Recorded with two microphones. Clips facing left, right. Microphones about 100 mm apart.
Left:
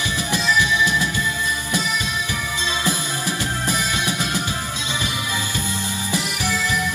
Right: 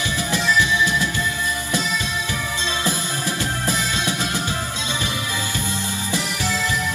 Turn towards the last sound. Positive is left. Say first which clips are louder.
# even
turn(degrees=20)  # may be behind; listen again after turning